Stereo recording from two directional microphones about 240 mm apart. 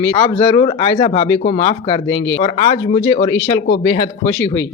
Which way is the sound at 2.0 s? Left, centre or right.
Left.